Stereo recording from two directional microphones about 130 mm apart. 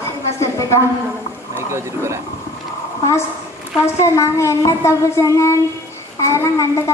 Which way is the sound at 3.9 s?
25° left (ahead or behind).